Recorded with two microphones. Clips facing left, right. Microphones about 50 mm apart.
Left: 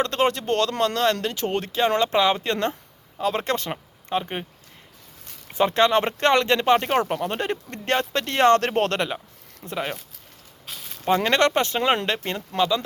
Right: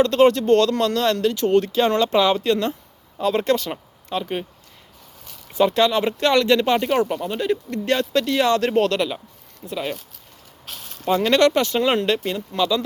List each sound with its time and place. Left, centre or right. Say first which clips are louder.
0.0 s speech: right 7 dB; left
5.5 s speech: right 1 dB; left
7.3 s speech: right 4 dB; left
7.9 s speech: right 3 dB; left
11.0 s speech: right 3 dB; left